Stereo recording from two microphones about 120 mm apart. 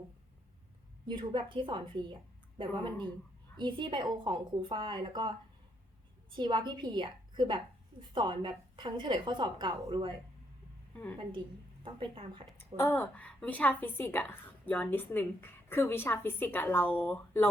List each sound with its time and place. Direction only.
1.0 s a woman's voice: 40° right (ahead or behind)
3.6 s a woman's voice: 40° right (ahead or behind)
6.3 s a woman's voice: 40° right (ahead or behind)
10.9 s a woman's voice: 15° left (ahead or behind)
11.2 s a woman's voice: 45° right (ahead or behind)
12.5 s a woman's voice: 20° left (ahead or behind)